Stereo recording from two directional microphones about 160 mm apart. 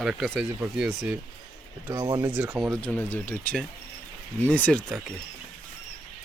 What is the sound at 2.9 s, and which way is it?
Speech, 10° left (ahead or behind).